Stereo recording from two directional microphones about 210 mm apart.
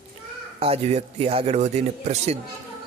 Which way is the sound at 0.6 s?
30° right (ahead or behind).